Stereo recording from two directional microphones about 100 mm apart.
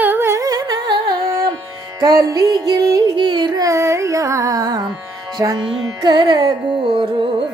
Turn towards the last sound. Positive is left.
turn(degrees=-60)  # may be behind; listen again after turning